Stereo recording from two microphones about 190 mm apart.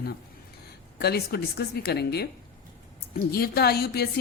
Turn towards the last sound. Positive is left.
turn(degrees=55)  # may be behind; listen again after turning